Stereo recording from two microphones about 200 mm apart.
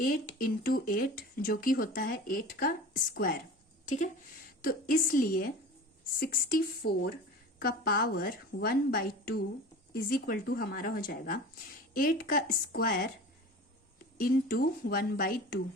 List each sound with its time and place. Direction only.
0.0 s speech: 45° left (ahead or behind)
14.2 s speech: 45° left (ahead or behind)